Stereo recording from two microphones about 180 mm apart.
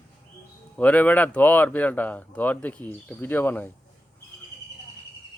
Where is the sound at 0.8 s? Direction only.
10° left (ahead or behind).